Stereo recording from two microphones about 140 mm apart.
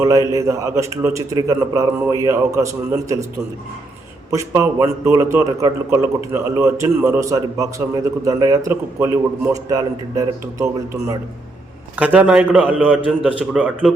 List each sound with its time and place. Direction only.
0.0 s a man's voice: 25° right (ahead or behind)
4.3 s a man's voice: 20° right (ahead or behind)
11.9 s a man's voice: 10° right (ahead or behind)